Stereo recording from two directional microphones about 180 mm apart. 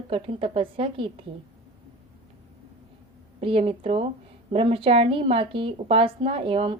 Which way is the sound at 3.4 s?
30° right (ahead or behind).